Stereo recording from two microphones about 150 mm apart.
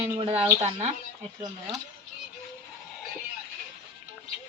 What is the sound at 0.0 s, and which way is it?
Speech, 40° right (ahead or behind).